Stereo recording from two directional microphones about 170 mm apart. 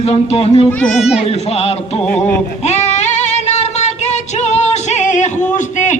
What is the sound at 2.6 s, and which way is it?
Female singing, 40° left (ahead or behind).